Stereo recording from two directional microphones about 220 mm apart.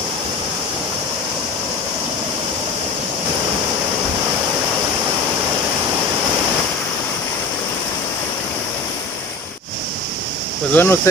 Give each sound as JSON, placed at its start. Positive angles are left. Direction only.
{"t": 10.7, "sound": "speech", "side_deg": 10}